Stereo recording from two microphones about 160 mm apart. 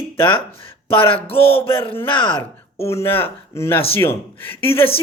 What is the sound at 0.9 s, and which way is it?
Speech, 35° left (ahead or behind).